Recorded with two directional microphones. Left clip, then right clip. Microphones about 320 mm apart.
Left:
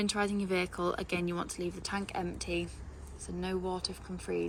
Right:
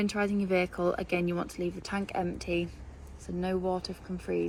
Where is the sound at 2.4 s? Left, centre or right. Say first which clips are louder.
Right 4 dB; centre.